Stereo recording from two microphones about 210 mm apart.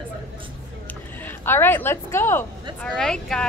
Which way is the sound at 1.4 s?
10° left (ahead or behind).